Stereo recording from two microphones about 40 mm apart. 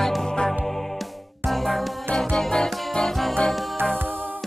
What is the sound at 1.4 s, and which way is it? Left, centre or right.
Music, centre.